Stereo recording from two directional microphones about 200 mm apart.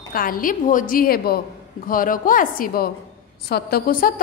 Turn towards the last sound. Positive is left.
turn(degrees=45)  # may be behind; listen again after turning